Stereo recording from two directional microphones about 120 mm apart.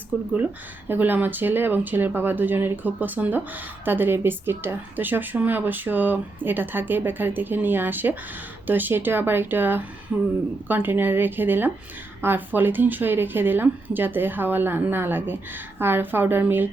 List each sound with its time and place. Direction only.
0.1 s speech: 10° right (ahead or behind)